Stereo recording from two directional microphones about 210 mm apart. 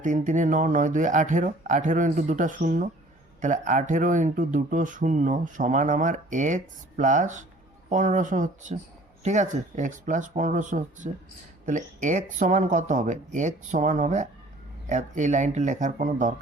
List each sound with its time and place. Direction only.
0.0 s speech: 35° right (ahead or behind)